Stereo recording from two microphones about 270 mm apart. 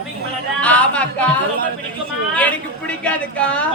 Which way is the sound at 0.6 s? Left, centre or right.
Centre.